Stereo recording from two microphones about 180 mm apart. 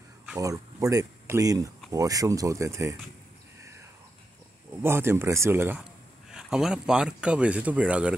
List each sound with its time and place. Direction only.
0.4 s speech: 20° right (ahead or behind)
4.8 s speech: 15° right (ahead or behind)